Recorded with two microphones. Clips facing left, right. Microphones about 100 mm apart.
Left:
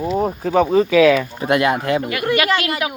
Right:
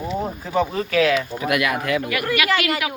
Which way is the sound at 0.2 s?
65° left (ahead or behind).